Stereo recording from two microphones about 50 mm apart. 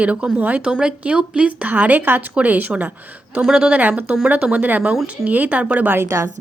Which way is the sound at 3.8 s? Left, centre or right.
Right.